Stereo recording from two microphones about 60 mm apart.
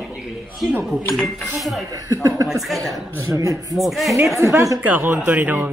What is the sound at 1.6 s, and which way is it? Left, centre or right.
Speech, centre.